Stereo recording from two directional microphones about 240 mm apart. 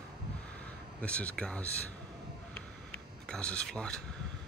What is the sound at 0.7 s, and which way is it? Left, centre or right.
Speech, centre.